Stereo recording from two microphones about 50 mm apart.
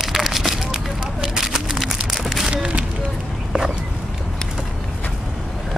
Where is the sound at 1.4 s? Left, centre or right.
Centre.